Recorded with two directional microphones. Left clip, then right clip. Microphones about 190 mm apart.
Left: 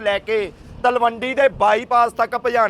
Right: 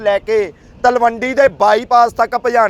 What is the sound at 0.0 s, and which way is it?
A man's voice, 40° right (ahead or behind).